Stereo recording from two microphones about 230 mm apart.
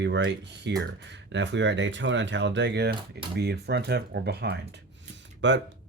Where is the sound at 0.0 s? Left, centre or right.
Right.